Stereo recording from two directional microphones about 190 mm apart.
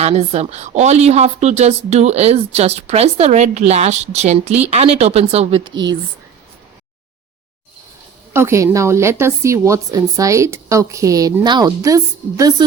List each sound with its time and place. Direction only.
0.0 s a woman's voice: 30° right (ahead or behind)
5.6 s speech: 75° right (ahead or behind)
8.3 s a woman's voice: 15° right (ahead or behind)